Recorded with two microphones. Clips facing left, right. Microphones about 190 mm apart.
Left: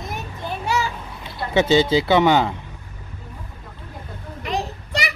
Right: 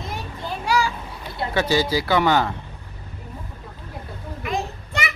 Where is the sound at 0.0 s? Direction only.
20° left (ahead or behind).